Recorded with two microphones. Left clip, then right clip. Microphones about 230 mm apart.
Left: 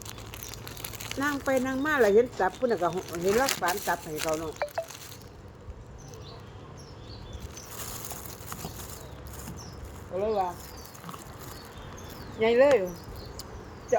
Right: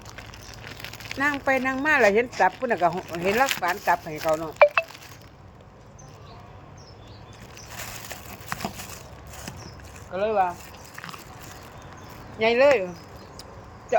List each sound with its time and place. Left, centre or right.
1.2 s speech: right
10.2 s speech: right
12.4 s speech: right